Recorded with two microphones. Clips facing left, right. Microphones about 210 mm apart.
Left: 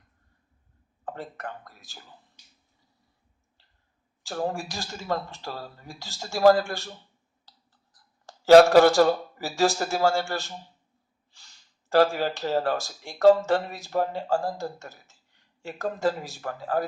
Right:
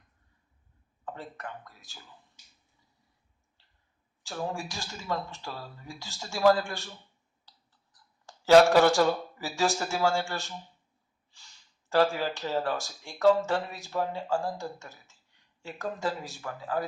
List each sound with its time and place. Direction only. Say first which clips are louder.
1.0 s speech: left 4 dB; 40° left (ahead or behind)
4.3 s speech: left 5 dB; 45° left (ahead or behind)
8.3 s speech: left 5 dB; 40° left (ahead or behind)
11.9 s speech: left 4 dB; 40° left (ahead or behind)